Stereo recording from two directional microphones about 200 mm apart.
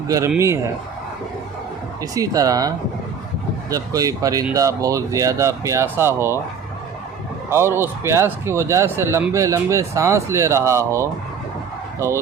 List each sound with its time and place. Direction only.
0.3 s speech: 15° right (ahead or behind)
2.0 s speech: 15° right (ahead or behind)
7.5 s speech: 10° right (ahead or behind)